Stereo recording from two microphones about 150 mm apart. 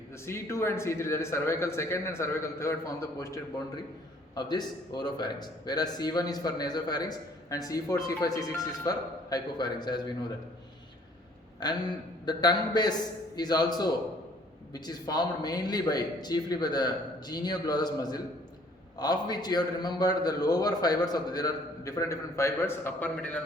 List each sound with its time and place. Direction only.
0.3 s a man's voice: 20° left (ahead or behind)
11.6 s a man's voice: 30° left (ahead or behind); by 23.4 s 10° left (ahead or behind)